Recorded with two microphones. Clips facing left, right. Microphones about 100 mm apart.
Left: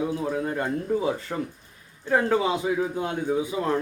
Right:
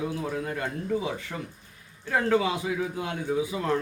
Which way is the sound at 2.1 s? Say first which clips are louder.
Left 2 dB; 20° left (ahead or behind).